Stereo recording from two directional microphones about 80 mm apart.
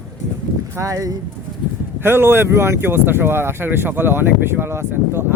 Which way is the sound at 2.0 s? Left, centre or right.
Right.